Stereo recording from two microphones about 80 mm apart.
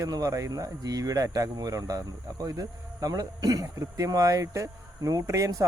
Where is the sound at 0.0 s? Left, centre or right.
Right.